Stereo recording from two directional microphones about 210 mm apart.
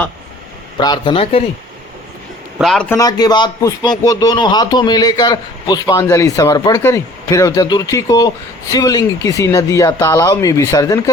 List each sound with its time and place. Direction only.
0.8 s a man's voice: 20° left (ahead or behind)
2.6 s a man's voice: centre (ahead or behind)
2.9 s speech: 20° left (ahead or behind)